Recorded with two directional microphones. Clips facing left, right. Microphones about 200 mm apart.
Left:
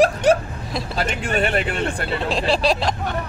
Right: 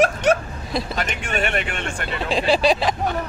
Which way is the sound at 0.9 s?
30° left (ahead or behind).